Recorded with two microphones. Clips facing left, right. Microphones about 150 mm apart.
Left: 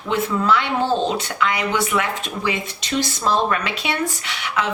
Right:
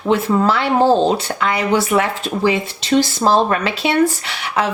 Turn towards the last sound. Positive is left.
turn(degrees=-30)  # may be behind; listen again after turning